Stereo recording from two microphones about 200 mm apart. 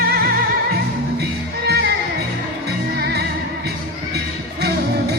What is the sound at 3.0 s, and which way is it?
Music, 55° right (ahead or behind).